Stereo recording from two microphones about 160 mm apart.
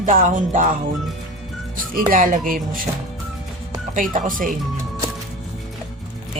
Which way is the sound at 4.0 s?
55° right (ahead or behind).